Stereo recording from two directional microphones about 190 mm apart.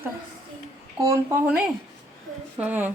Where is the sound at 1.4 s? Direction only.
5° right (ahead or behind).